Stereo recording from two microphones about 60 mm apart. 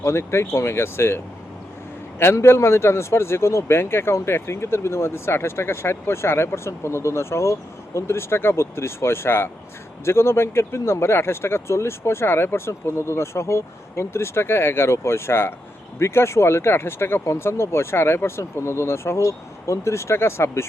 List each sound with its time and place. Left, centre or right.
0.0 s speech: left